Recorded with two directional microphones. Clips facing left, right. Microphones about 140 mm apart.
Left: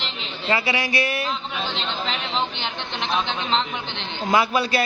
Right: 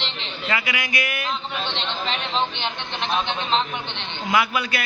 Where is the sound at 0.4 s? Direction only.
30° left (ahead or behind).